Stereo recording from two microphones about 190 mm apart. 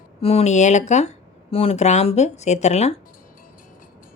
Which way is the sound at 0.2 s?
30° left (ahead or behind).